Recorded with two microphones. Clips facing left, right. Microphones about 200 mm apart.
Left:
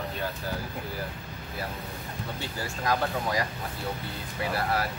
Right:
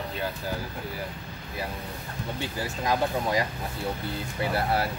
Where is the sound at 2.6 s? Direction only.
20° right (ahead or behind).